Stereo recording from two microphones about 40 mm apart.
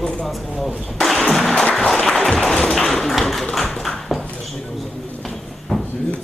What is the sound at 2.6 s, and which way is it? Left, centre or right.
Tap, centre.